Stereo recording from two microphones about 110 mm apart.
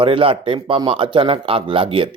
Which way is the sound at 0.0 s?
55° right (ahead or behind).